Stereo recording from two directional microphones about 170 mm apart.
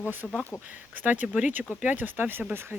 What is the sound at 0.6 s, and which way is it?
Speech, 10° right (ahead or behind).